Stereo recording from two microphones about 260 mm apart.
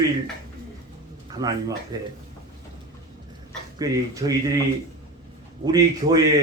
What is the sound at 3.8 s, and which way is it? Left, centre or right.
Speech, centre.